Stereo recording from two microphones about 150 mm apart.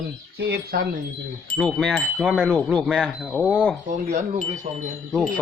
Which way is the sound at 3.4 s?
10° right (ahead or behind).